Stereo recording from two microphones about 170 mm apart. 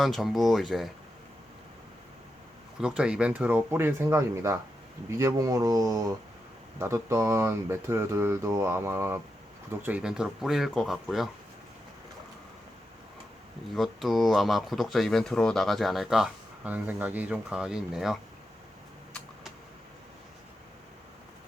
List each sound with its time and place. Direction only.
0.0 s speech: centre (ahead or behind)
2.8 s speech: 5° right (ahead or behind)
13.7 s speech: centre (ahead or behind)